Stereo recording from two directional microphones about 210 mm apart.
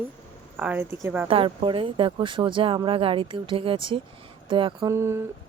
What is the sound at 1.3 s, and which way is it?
Speech, 25° right (ahead or behind).